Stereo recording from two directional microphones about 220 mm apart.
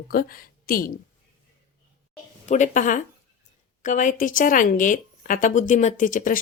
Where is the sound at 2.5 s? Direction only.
35° left (ahead or behind).